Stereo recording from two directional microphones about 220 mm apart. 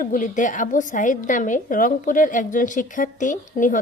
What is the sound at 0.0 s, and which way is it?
Speech, 35° left (ahead or behind).